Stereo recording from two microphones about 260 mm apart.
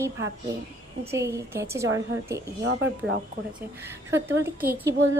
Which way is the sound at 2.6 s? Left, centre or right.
Right.